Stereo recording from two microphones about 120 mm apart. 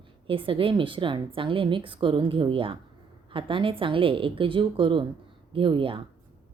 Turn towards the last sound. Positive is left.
turn(degrees=-45)  # may be behind; listen again after turning